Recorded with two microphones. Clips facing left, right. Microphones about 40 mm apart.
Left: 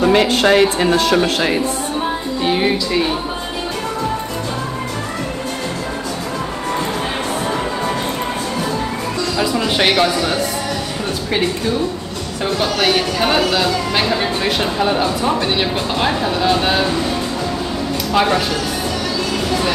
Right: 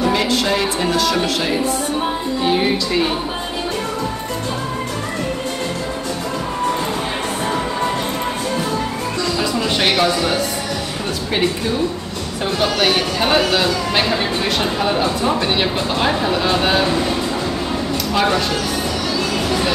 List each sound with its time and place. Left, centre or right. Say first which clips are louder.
0.0 s speech: left 4 dB; left
2.4 s speech: left 1 dB; centre
9.8 s speech: even; centre
12.7 s speech: left 1 dB; centre
18.1 s speech: left 2 dB; centre